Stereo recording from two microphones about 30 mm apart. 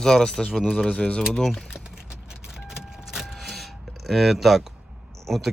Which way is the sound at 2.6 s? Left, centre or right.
Centre.